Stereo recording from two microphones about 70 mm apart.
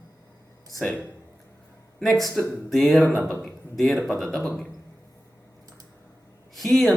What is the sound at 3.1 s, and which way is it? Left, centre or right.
Speech, left.